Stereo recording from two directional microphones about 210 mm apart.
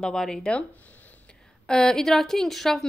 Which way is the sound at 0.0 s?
5° left (ahead or behind).